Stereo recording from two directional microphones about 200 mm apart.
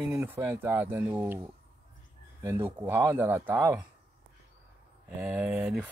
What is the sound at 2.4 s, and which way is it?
Speech, 10° right (ahead or behind).